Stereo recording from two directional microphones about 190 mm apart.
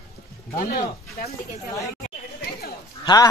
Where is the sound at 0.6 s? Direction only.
50° left (ahead or behind).